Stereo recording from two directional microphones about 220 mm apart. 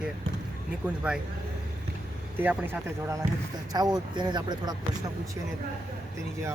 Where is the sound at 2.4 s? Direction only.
10° right (ahead or behind).